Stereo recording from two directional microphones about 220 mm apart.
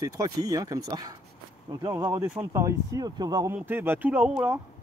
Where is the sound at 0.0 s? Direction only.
15° right (ahead or behind).